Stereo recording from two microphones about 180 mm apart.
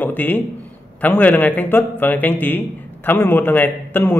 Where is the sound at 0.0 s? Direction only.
10° left (ahead or behind).